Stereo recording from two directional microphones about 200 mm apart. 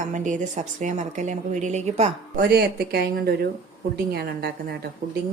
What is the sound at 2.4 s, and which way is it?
Speech, 50° right (ahead or behind).